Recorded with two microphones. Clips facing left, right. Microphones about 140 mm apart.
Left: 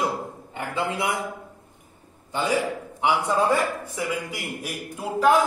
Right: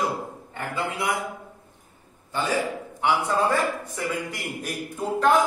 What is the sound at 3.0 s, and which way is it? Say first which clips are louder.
A man's voice: left 1 dB; 10° left (ahead or behind).